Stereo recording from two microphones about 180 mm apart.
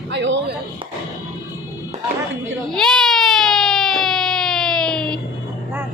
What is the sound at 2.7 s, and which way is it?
Baby cry, centre (ahead or behind).